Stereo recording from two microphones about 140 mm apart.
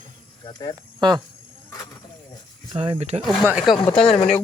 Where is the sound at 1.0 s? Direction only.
30° right (ahead or behind).